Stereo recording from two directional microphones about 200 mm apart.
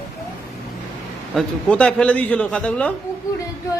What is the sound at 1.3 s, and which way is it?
A man's voice, 5° left (ahead or behind).